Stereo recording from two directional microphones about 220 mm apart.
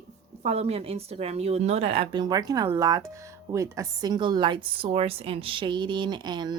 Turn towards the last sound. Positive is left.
turn(degrees=-20)  # may be behind; listen again after turning